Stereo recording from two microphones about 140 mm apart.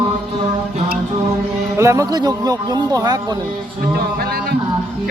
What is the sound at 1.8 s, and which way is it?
A man's voice, 20° right (ahead or behind).